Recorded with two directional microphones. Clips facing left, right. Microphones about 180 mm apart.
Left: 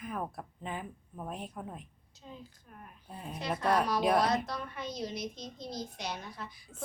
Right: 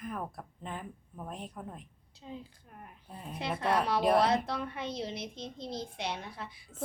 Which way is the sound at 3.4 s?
25° right (ahead or behind).